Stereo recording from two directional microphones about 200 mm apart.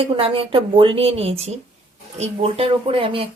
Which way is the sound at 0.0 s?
30° right (ahead or behind).